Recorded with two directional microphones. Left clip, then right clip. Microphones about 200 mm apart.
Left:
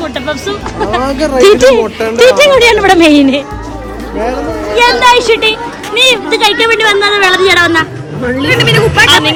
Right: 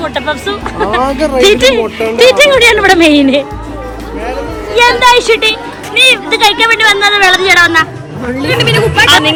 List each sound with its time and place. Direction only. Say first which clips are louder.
0.0 s a woman's voice: right 1 dB; 10° left (ahead or behind)
1.2 s speech: left 3 dB; centre (ahead or behind)
1.5 s a woman's voice: left 3 dB; 20° left (ahead or behind)
4.9 s a woman's voice: even; 10° left (ahead or behind)